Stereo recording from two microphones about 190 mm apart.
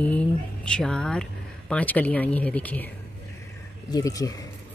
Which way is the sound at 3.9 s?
20° left (ahead or behind).